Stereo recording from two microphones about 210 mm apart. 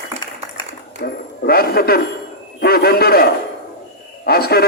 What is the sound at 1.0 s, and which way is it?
A man's voice, 50° left (ahead or behind).